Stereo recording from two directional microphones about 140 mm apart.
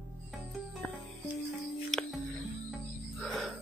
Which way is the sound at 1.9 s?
Centre (ahead or behind).